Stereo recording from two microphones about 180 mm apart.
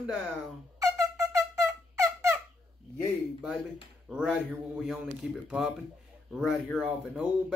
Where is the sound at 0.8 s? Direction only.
20° right (ahead or behind).